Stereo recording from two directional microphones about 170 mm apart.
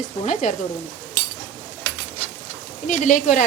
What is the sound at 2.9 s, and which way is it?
Speech, 50° left (ahead or behind).